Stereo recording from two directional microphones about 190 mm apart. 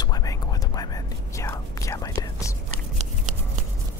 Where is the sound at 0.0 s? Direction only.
20° left (ahead or behind).